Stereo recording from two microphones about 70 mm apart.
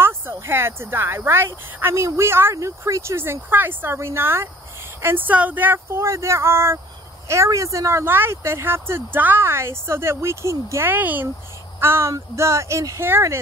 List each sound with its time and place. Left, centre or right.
0.0 s speech: right
2.5 s speech: right
5.0 s speech: right
10.9 s speech: right